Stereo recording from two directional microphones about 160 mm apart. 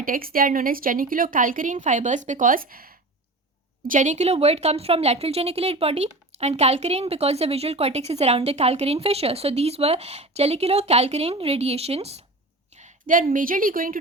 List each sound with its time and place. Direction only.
0.0 s a woman's voice: 65° right (ahead or behind)
3.8 s a woman's voice: 50° right (ahead or behind)
12.7 s a sound: 50° right (ahead or behind)
13.3 s a woman's voice: 60° right (ahead or behind)